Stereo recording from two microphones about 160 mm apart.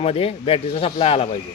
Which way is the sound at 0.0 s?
40° left (ahead or behind).